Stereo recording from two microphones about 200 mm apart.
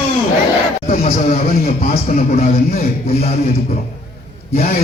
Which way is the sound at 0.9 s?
35° left (ahead or behind).